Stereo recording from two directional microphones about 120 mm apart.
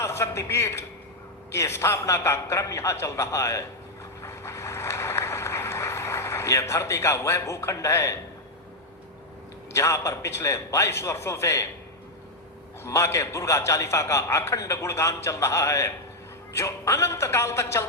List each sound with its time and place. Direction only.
0.0 s a man's voice: 20° left (ahead or behind)
4.2 s vehicle: 20° left (ahead or behind)
9.7 s a man's voice: 25° left (ahead or behind)
12.8 s a man's voice: 25° left (ahead or behind)